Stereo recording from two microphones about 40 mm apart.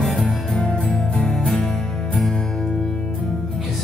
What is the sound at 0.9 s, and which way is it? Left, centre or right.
Music, left.